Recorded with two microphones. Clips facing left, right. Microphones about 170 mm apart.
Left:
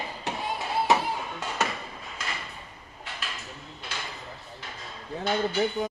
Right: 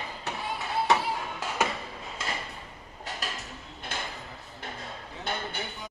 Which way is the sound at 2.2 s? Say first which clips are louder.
Right 2 dB; 25° right (ahead or behind).